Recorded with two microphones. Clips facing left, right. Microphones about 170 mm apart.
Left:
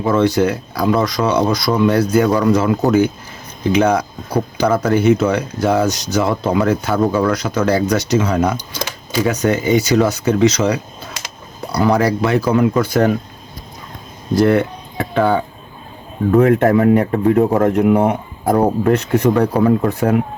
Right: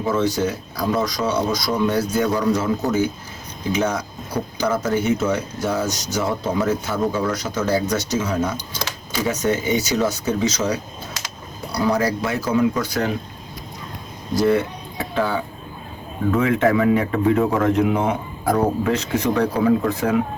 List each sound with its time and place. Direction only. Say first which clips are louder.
0.0 s speech: left 6 dB; 65° left (ahead or behind)
14.4 s speech: left 3 dB; 60° left (ahead or behind)
16.4 s a man's voice: left 5 dB; 50° left (ahead or behind)